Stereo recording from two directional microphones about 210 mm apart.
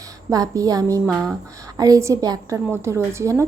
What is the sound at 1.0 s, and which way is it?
Speech, centre (ahead or behind).